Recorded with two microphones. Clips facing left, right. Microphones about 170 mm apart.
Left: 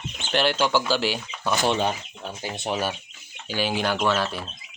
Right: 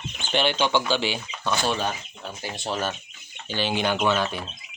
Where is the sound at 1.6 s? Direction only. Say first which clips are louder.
Left 3 dB; 20° left (ahead or behind).